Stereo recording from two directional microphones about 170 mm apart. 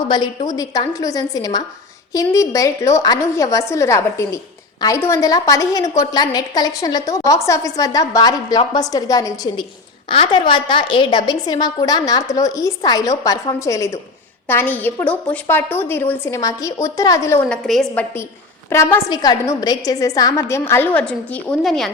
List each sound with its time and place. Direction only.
0.5 s a woman's voice: 20° left (ahead or behind)
17.6 s a woman's voice: centre (ahead or behind)
18.7 s a woman's voice: 15° left (ahead or behind)